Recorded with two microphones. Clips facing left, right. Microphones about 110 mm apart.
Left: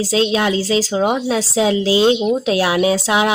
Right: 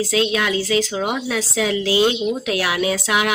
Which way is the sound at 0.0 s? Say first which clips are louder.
Left 3 dB; 30° left (ahead or behind).